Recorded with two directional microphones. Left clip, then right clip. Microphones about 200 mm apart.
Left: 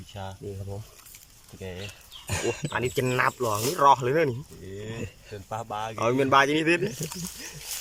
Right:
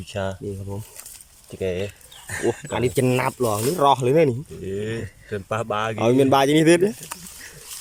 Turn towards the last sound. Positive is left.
turn(degrees=-30)  # may be behind; listen again after turning